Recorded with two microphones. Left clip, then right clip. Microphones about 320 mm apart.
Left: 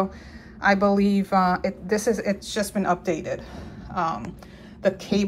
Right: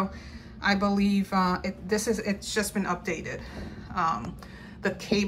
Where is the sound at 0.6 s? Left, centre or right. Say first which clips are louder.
Left 6 dB; centre.